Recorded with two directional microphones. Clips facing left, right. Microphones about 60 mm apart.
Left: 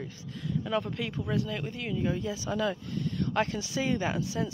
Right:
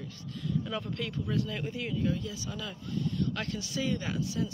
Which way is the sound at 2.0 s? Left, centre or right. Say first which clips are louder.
Left 3 dB; left.